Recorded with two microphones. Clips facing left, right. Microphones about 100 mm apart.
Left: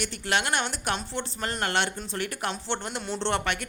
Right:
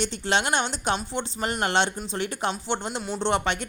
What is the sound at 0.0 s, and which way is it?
Speech, 25° right (ahead or behind).